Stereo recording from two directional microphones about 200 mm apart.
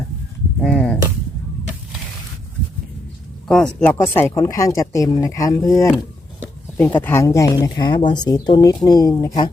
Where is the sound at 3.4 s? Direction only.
5° left (ahead or behind).